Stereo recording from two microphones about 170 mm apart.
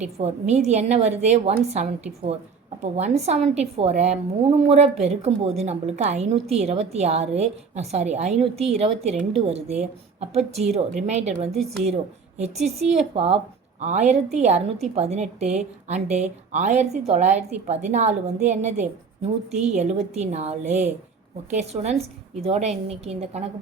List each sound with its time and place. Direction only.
0.0 s a woman's voice: 40° right (ahead or behind)